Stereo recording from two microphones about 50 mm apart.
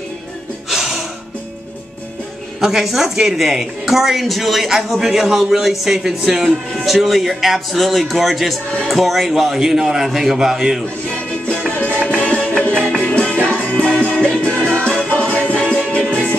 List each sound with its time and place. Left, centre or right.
0.7 s gasp: centre
2.6 s a woman's voice: centre
11.1 s music: left